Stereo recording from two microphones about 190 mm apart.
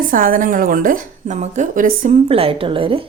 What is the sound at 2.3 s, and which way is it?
Speech, 30° right (ahead or behind).